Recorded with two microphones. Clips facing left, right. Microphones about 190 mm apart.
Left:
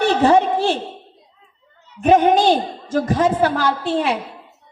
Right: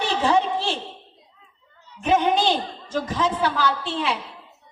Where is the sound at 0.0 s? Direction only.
50° left (ahead or behind).